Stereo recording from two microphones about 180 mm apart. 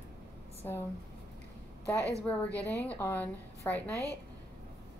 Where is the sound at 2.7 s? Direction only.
10° left (ahead or behind).